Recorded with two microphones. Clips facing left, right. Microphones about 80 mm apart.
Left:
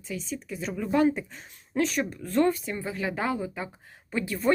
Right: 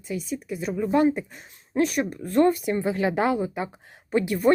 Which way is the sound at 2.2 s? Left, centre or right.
Right.